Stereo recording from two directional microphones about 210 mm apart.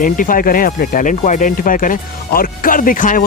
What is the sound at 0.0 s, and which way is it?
Speech, 40° left (ahead or behind).